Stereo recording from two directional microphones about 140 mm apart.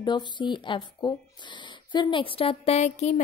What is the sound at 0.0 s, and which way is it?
Speech, 30° left (ahead or behind).